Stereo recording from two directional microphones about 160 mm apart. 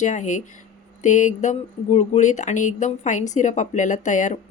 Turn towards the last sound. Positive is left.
turn(degrees=50)  # may be behind; listen again after turning